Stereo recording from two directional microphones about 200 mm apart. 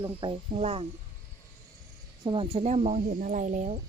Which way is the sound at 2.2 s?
25° right (ahead or behind).